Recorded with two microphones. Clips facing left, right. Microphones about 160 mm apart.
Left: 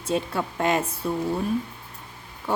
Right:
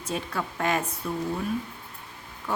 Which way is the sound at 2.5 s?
25° left (ahead or behind).